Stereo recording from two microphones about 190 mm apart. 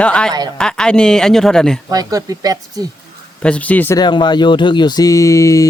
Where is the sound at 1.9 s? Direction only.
20° right (ahead or behind).